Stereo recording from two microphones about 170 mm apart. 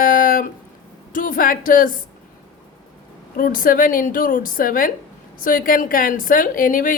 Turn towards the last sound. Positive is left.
turn(degrees=55)  # may be behind; listen again after turning